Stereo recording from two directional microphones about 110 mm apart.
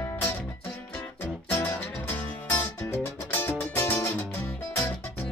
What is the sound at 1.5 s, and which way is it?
Music, 15° left (ahead or behind).